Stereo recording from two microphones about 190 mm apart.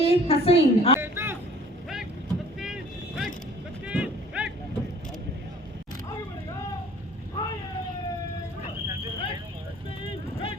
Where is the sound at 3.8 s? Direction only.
5° right (ahead or behind).